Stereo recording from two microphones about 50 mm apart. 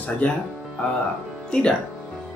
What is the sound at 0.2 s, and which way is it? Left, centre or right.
Speech, left.